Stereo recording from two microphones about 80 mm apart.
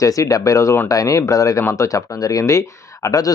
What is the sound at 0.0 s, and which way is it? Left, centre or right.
Speech, left.